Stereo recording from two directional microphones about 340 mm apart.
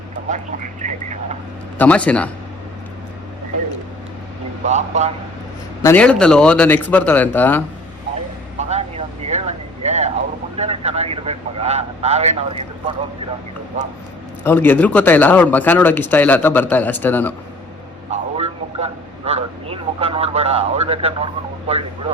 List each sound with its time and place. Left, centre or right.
0.8 s speech: right
1.8 s speech: centre
4.6 s speech: centre
5.8 s speech: centre
8.5 s vehicle: centre
14.4 s speech: centre
18.1 s a sound: centre
21.7 s speech: centre